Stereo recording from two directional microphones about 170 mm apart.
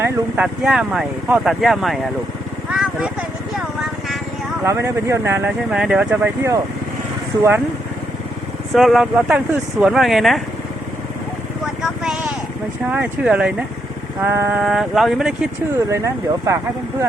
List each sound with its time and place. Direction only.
0.0 s speech: 5° right (ahead or behind)
2.7 s vehicle: 5° right (ahead or behind)
4.6 s speech: 15° right (ahead or behind)
8.7 s speech: centre (ahead or behind)
11.8 s vehicle: 5° right (ahead or behind)
12.9 s speech: 10° right (ahead or behind)
14.6 s speech: centre (ahead or behind)
15.9 s speech: 15° right (ahead or behind)